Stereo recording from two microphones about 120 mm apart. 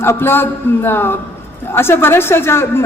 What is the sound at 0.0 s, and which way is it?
A woman's voice, 20° left (ahead or behind).